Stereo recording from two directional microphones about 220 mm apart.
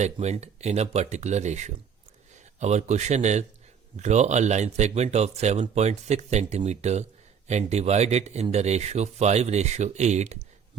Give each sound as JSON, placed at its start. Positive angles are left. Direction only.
{"t": 0.0, "sound": "speech", "side_deg": -30}